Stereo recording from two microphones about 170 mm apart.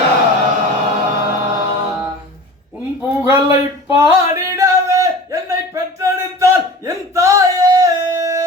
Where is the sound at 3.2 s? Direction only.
15° right (ahead or behind).